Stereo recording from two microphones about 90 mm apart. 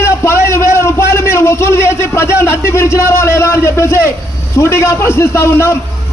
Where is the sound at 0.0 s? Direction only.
30° left (ahead or behind).